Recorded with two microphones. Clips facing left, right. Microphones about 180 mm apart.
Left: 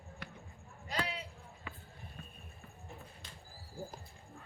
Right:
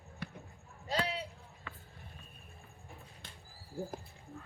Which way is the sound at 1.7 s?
10° left (ahead or behind).